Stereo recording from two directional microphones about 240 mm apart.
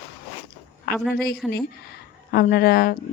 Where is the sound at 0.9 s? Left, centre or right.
Left.